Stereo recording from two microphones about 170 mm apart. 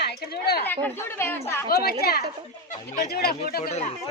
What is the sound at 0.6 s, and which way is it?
Speech, 10° left (ahead or behind).